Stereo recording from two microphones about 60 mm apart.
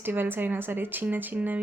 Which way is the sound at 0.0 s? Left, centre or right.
Right.